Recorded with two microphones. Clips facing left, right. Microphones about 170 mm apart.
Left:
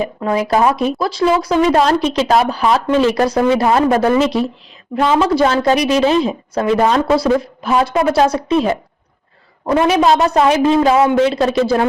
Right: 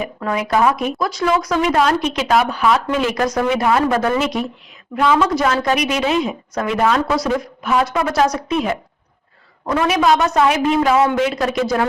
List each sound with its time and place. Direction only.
0.0 s a woman's voice: 30° left (ahead or behind)